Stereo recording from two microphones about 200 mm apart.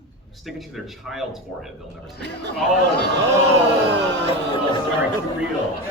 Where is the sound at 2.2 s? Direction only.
60° right (ahead or behind).